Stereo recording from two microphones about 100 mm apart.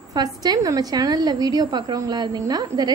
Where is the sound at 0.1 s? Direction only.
40° right (ahead or behind).